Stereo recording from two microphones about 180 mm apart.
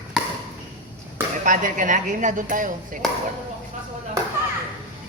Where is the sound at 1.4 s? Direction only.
45° right (ahead or behind).